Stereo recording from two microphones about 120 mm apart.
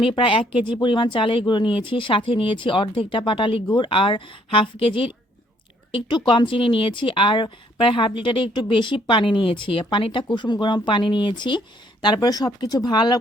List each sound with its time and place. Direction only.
0.0 s speech: 45° left (ahead or behind)